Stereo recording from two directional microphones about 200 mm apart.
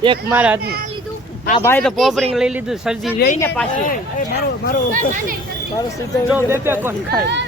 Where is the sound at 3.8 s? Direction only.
45° left (ahead or behind).